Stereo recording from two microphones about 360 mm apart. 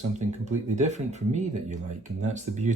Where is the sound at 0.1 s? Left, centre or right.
Centre.